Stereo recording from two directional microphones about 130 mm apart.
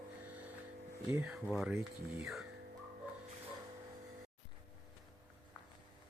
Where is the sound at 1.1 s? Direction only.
15° right (ahead or behind).